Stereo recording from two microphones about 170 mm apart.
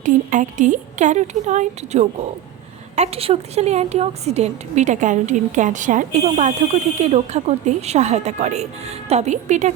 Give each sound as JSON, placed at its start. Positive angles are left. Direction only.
{"t": 0.0, "sound": "a woman's voice", "side_deg": -50}